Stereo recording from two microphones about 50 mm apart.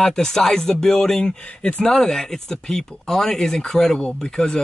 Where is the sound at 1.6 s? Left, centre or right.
Left.